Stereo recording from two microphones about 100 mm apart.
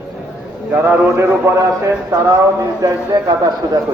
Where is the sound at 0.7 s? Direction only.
25° right (ahead or behind); by 3.8 s 40° right (ahead or behind).